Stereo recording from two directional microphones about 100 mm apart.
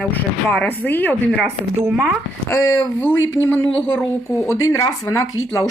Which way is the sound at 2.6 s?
35° left (ahead or behind).